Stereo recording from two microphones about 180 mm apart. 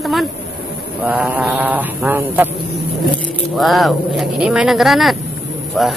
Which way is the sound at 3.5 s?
Centre (ahead or behind).